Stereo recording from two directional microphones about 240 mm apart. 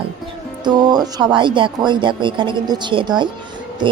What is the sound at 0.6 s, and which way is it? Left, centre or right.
Speech, centre.